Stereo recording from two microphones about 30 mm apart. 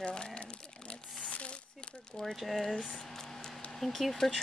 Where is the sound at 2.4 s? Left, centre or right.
Centre.